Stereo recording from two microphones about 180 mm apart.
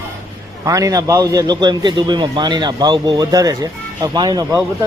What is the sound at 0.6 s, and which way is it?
A man's voice, 20° right (ahead or behind).